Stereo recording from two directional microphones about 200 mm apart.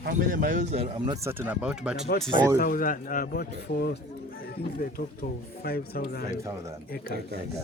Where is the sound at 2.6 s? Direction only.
45° left (ahead or behind).